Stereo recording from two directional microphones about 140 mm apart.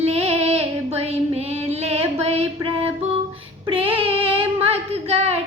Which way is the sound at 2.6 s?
45° right (ahead or behind).